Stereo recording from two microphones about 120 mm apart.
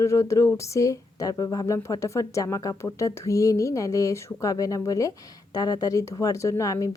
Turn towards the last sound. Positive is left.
turn(degrees=30)  # may be behind; listen again after turning